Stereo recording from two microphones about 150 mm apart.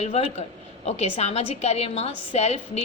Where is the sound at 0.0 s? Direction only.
45° left (ahead or behind).